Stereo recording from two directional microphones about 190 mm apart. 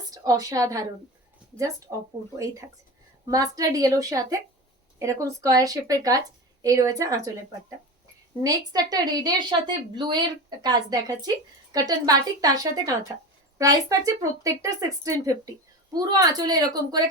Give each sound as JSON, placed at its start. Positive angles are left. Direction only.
{"t": 0.1, "sound": "a woman's voice", "side_deg": -20}
{"t": 3.2, "sound": "a woman's voice", "side_deg": -15}
{"t": 8.4, "sound": "a woman's voice", "side_deg": -20}